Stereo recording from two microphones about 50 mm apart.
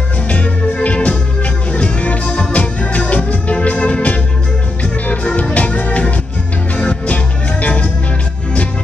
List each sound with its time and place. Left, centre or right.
0.3 s music: left